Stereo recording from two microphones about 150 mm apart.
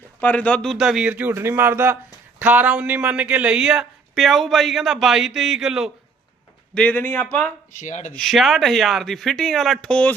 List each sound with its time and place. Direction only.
0.2 s a man's voice: 10° left (ahead or behind)
6.7 s a man's voice: 10° left (ahead or behind)
7.8 s speech: 55° left (ahead or behind)
8.1 s speech: centre (ahead or behind)